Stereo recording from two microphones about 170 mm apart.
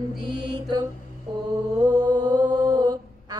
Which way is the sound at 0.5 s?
20° right (ahead or behind).